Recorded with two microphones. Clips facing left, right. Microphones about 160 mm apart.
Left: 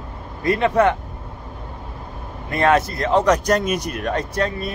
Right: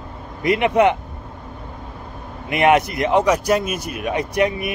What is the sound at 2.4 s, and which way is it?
Speech, 15° right (ahead or behind).